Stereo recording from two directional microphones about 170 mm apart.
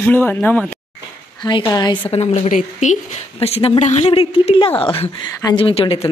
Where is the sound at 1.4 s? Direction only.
25° left (ahead or behind).